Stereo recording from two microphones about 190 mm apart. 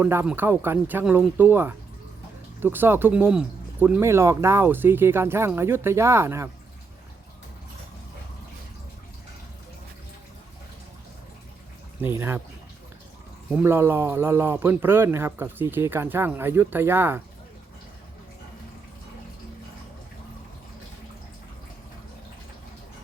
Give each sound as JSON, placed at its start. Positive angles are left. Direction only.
{"t": 0.0, "sound": "speech", "side_deg": -10}
{"t": 11.9, "sound": "speech", "side_deg": -10}
{"t": 13.5, "sound": "speech", "side_deg": -10}